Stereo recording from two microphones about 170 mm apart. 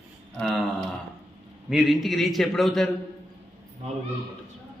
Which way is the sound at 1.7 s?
Centre (ahead or behind).